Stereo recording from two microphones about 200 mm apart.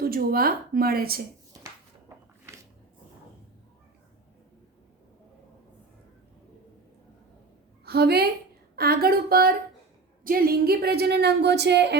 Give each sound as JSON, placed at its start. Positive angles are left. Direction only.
{"t": 0.0, "sound": "a woman's voice", "side_deg": -50}
{"t": 7.9, "sound": "a woman's voice", "side_deg": -55}